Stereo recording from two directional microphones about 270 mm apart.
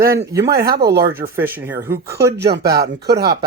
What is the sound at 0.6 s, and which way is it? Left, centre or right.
Speech, right.